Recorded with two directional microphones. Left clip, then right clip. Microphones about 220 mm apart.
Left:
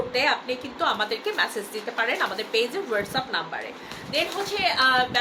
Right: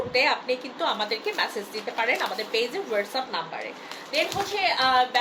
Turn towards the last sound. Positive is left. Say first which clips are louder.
# left 1 dB
turn(degrees=15)  # may be behind; listen again after turning